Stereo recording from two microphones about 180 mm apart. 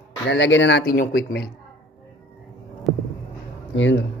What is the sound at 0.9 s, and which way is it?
Speech, 55° left (ahead or behind).